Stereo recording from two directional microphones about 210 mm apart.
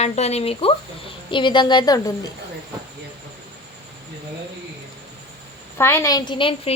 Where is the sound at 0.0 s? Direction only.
30° left (ahead or behind).